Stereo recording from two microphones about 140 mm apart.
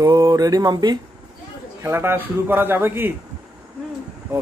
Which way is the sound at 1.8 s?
15° right (ahead or behind).